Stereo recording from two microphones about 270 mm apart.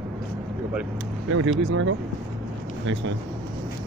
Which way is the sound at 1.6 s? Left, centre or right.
Right.